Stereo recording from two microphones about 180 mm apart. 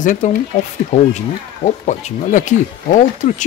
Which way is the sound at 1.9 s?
40° left (ahead or behind).